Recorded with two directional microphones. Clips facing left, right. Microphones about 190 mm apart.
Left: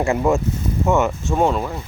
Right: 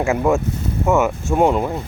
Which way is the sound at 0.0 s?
Centre (ahead or behind).